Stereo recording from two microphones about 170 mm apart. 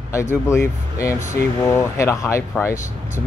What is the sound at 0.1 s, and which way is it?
Speech, 15° left (ahead or behind).